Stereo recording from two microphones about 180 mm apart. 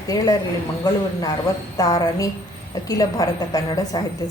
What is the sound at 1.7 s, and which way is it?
A woman's voice, 20° left (ahead or behind).